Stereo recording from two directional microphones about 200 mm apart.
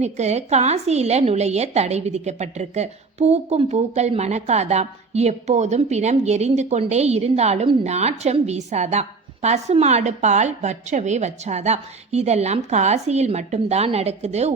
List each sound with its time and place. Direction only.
0.0 s a woman's voice: 35° right (ahead or behind)